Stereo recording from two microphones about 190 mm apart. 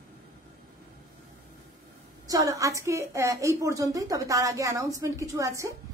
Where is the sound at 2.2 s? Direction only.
20° right (ahead or behind).